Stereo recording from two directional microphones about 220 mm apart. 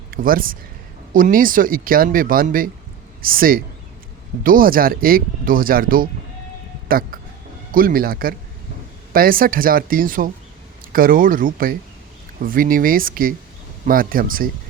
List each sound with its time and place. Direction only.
0.1 s speech: 40° right (ahead or behind)